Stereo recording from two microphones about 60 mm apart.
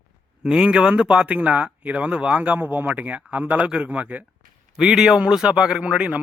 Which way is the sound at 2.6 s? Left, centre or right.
Right.